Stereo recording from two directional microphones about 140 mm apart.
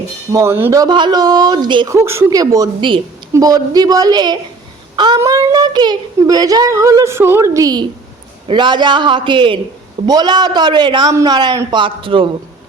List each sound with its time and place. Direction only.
0.3 s speech: 20° right (ahead or behind)
0.8 s a man's voice: 30° right (ahead or behind)
1.9 s speech: 20° right (ahead or behind)
4.9 s a sound: 30° right (ahead or behind)
5.2 s a man's voice: 25° right (ahead or behind)